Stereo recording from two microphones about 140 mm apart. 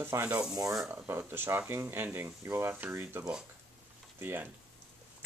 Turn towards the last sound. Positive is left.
turn(degrees=-15)  # may be behind; listen again after turning